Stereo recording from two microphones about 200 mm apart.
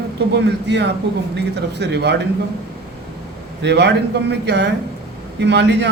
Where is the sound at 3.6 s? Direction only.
60° right (ahead or behind).